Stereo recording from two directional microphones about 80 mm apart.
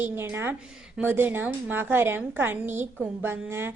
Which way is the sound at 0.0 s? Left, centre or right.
Right.